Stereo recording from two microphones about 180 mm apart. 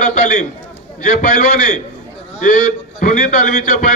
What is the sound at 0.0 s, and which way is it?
A man's voice, 45° left (ahead or behind).